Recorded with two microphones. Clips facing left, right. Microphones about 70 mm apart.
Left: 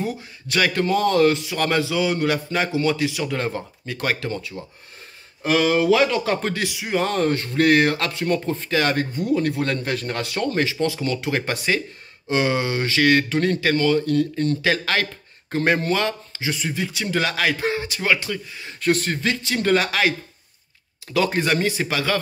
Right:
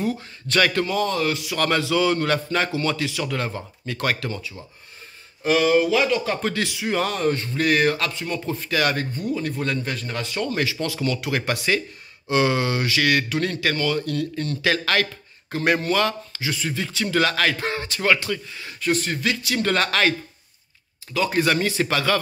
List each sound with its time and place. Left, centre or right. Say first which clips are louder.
0.0 s speech: right 2 dB; centre
0.8 s speech: left 5 dB; left
1.3 s speech: left 1 dB; left
5.4 s speech: right 1 dB; left
6.5 s speech: even; left
7.1 s speech: left 2 dB; left
8.5 s speech: left 2 dB; left
9.3 s speech: left 4 dB; left
10.5 s speech: left 3 dB; left
18.8 s speech: left 2 dB; left
19.2 s speech: left 2 dB; left
19.7 s speech: left 2 dB; centre
21.3 s speech: even; left